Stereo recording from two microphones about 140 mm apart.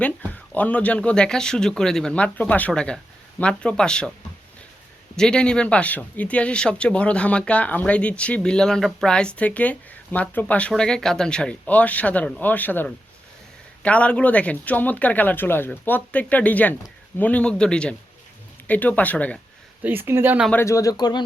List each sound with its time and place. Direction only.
0.0 s speech: 10° left (ahead or behind)
5.1 s speech: 5° left (ahead or behind)
19.8 s speech: 15° right (ahead or behind)
20.5 s speech: 20° left (ahead or behind)